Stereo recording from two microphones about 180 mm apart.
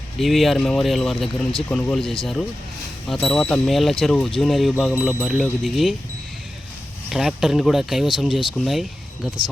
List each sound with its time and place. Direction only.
0.2 s speech: centre (ahead or behind)
7.1 s speech: centre (ahead or behind)